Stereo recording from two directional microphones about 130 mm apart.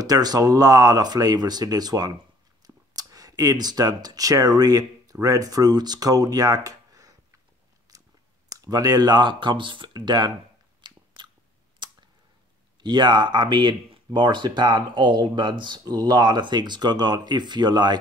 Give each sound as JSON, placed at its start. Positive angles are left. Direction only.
{"t": 0.0, "sound": "speech", "side_deg": -30}
{"t": 7.9, "sound": "chewing", "side_deg": -30}
{"t": 8.5, "sound": "speech", "side_deg": -30}
{"t": 10.8, "sound": "biting", "side_deg": -35}
{"t": 12.8, "sound": "speech", "side_deg": -35}